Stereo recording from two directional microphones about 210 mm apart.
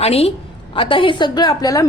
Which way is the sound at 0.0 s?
30° left (ahead or behind).